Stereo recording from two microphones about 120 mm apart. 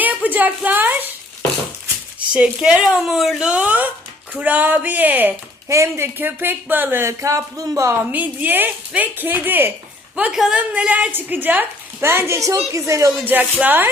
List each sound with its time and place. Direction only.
0.0 s a woman's voice: 15° right (ahead or behind)
2.3 s speech: 5° right (ahead or behind)
5.6 s speech: 25° right (ahead or behind)
13.2 s speech: 15° right (ahead or behind)